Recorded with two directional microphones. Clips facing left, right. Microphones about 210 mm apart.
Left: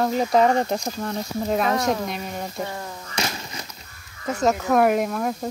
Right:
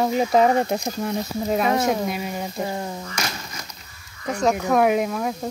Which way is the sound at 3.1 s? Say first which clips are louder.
Left 2 dB; 30° left (ahead or behind).